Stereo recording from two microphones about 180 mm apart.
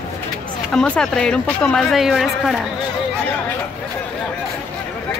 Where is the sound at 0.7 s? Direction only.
5° left (ahead or behind).